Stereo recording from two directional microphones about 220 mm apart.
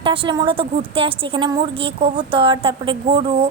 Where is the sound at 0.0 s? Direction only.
25° right (ahead or behind).